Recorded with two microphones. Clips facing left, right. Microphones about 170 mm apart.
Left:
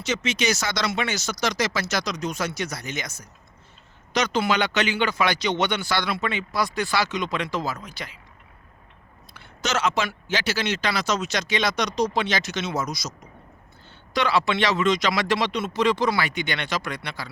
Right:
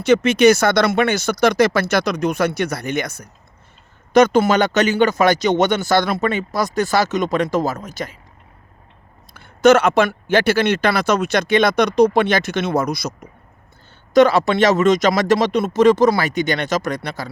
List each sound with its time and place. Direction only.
0.0 s speech: 55° right (ahead or behind)
9.3 s speech: 55° right (ahead or behind)
14.1 s speech: 45° right (ahead or behind)